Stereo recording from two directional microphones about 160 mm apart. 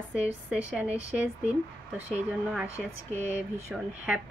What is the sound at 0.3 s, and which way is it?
Speech, 10° right (ahead or behind).